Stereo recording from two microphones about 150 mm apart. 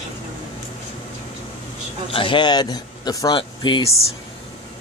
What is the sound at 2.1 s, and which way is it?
Speech, 35° left (ahead or behind).